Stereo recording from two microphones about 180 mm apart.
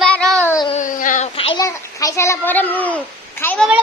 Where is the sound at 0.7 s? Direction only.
45° left (ahead or behind).